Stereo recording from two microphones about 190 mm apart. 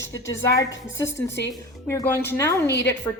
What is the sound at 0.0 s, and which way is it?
A woman's voice, 15° left (ahead or behind).